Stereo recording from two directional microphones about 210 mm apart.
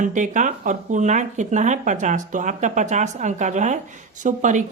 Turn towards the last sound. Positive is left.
turn(degrees=-35)  # may be behind; listen again after turning